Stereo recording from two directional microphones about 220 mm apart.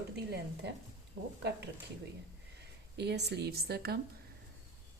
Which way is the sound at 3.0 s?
50° right (ahead or behind).